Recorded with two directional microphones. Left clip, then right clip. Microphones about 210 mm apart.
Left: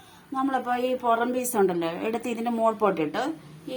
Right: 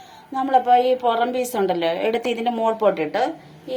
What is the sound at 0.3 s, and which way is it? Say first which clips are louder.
A woman's voice: right 10 dB; 55° left (ahead or behind).